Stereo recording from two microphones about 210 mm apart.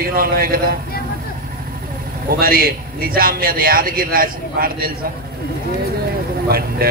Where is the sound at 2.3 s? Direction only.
45° right (ahead or behind).